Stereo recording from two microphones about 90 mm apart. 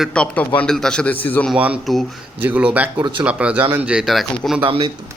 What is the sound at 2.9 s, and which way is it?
Speech, 55° right (ahead or behind).